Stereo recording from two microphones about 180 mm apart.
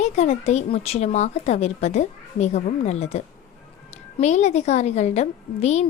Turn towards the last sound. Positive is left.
turn(degrees=35)  # may be behind; listen again after turning